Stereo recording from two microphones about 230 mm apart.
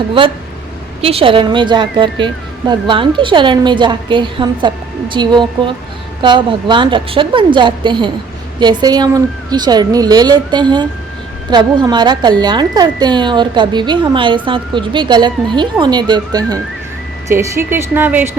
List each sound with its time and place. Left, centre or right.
1.0 s a woman's voice: right; by 18.3 s centre